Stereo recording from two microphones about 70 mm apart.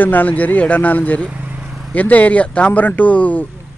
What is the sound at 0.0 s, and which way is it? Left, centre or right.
Speech, left.